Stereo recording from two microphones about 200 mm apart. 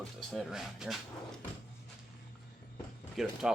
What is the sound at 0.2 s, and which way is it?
Speech, centre (ahead or behind).